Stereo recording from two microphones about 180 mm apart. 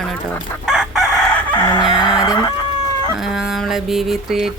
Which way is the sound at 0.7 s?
Centre (ahead or behind).